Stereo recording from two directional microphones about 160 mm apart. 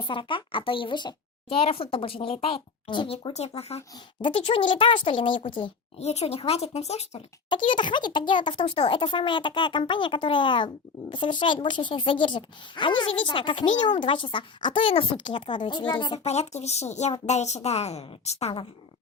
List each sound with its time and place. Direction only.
0.0 s speech: 30° left (ahead or behind)
7.5 s speech: 30° left (ahead or behind)
16.1 s a woman's voice: 45° left (ahead or behind)